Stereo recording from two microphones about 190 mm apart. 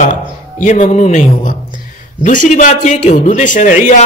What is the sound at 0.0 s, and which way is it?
A man's voice, 40° left (ahead or behind).